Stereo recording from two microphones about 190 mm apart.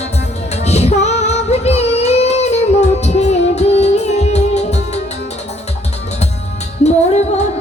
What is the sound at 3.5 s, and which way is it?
Music, 35° left (ahead or behind).